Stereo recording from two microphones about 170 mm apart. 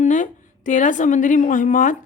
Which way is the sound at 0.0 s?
45° left (ahead or behind).